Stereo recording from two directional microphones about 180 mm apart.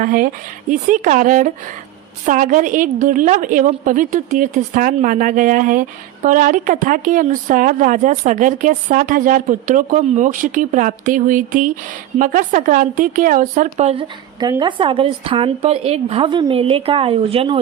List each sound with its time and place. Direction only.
0.0 s speech: 50° right (ahead or behind)
13.7 s a woman's voice: 35° right (ahead or behind)